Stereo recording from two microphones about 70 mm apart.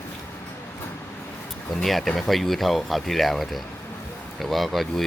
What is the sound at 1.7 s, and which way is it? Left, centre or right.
Speech, centre.